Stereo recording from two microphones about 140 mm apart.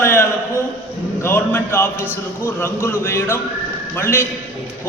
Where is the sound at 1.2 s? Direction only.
15° left (ahead or behind).